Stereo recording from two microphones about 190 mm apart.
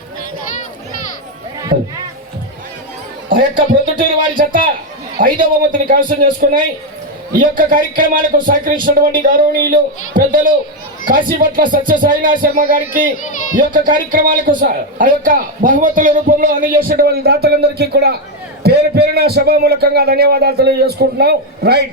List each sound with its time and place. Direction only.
1.7 s speech: 40° right (ahead or behind)
3.2 s a sound: 50° right (ahead or behind)
4.4 s a man's voice: 45° right (ahead or behind)